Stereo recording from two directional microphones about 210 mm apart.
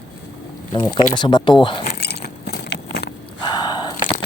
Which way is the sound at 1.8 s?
50° left (ahead or behind).